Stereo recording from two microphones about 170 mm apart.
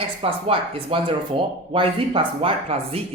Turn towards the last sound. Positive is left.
turn(degrees=-35)  # may be behind; listen again after turning